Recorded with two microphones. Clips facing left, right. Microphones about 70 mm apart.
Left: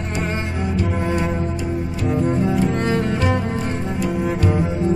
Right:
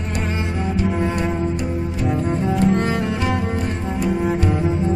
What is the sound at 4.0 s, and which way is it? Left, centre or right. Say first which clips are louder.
Cello: right 2 dB; centre.